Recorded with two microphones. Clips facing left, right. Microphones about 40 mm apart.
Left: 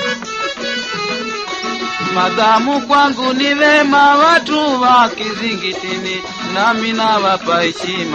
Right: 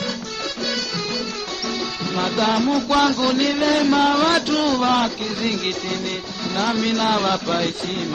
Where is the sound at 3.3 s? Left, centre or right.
Left.